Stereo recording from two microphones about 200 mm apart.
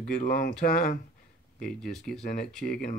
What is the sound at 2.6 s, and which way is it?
Speech, 50° left (ahead or behind).